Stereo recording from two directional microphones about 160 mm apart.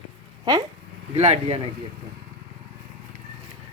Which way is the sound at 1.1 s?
40° right (ahead or behind).